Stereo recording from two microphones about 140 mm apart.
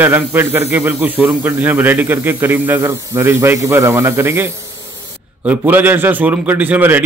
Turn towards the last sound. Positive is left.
turn(degrees=-10)  # may be behind; listen again after turning